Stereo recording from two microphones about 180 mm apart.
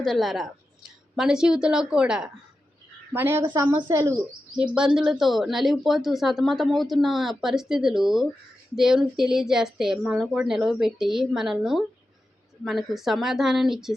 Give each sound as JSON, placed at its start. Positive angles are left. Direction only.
{"t": 0.0, "sound": "a woman's voice", "side_deg": 0}
{"t": 4.5, "sound": "speech", "side_deg": -5}